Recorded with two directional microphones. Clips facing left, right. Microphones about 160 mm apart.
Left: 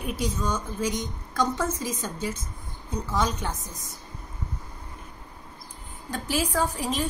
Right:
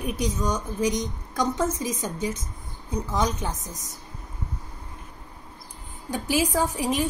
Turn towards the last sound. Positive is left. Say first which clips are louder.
# right 2 dB
turn(degrees=-15)  # may be behind; listen again after turning